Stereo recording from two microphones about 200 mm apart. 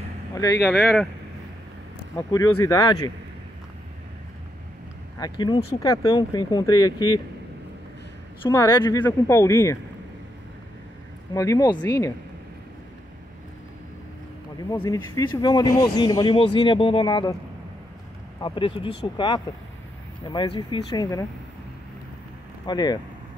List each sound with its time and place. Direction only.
0.3 s speech: 15° left (ahead or behind)
2.1 s speech: 15° left (ahead or behind)
5.2 s speech: 20° left (ahead or behind)
8.5 s speech: 15° left (ahead or behind)
11.3 s speech: 15° left (ahead or behind)
14.6 s speech: 20° left (ahead or behind)
18.4 s speech: 25° left (ahead or behind)
22.7 s speech: 20° left (ahead or behind)